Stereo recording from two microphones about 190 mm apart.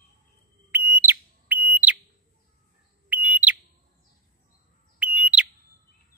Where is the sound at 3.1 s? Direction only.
10° right (ahead or behind).